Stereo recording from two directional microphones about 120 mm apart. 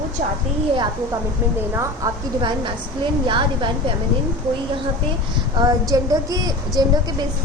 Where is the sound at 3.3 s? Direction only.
45° right (ahead or behind).